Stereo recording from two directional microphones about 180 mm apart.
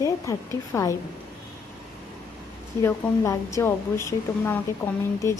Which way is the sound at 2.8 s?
15° left (ahead or behind).